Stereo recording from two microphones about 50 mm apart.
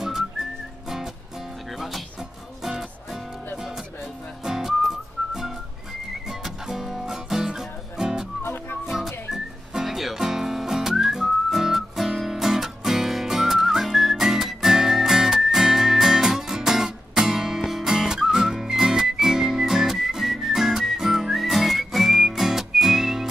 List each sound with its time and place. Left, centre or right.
1.8 s music: centre
4.5 s whistling: centre
6.4 s music: centre
8.4 s music: left
8.8 s music: centre